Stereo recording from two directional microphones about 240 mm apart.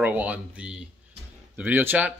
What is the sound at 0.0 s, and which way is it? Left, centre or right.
Speech, centre.